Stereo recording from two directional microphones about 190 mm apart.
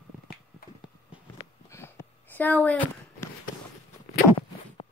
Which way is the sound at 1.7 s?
15° left (ahead or behind).